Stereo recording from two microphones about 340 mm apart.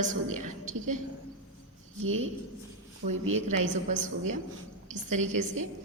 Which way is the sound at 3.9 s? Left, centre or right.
Right.